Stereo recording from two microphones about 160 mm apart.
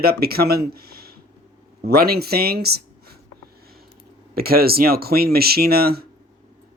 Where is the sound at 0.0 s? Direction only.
75° right (ahead or behind).